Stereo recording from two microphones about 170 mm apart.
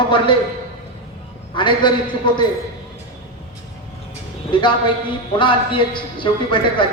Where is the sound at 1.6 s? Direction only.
30° left (ahead or behind).